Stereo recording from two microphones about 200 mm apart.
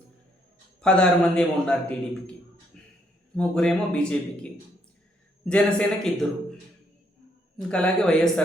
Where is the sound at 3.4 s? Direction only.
5° left (ahead or behind).